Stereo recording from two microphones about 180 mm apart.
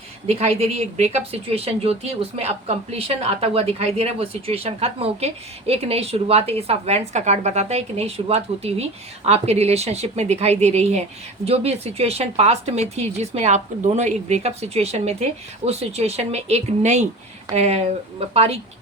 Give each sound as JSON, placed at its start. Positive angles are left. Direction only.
{"t": 0.3, "sound": "speech", "side_deg": -35}